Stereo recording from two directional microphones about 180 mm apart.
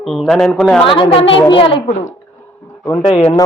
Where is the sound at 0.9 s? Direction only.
30° left (ahead or behind).